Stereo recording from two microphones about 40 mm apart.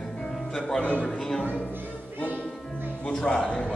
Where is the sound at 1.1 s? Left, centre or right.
Centre.